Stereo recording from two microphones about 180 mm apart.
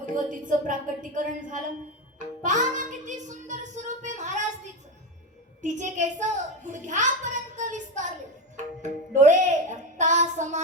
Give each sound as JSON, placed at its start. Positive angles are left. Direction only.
{"t": 0.0, "sound": "a woman's voice", "side_deg": -45}
{"t": 2.1, "sound": "music", "side_deg": -45}
{"t": 5.6, "sound": "a child's voice", "side_deg": -45}
{"t": 8.5, "sound": "music", "side_deg": -45}